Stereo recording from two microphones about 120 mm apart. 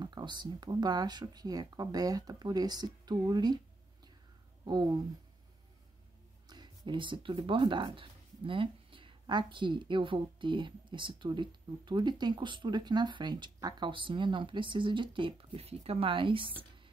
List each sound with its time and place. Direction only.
0.0 s speech: 40° right (ahead or behind)
4.6 s speech: 35° right (ahead or behind)
6.5 s speech: 40° right (ahead or behind)